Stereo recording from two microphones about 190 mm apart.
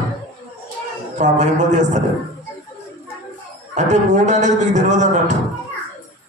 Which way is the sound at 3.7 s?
40° right (ahead or behind).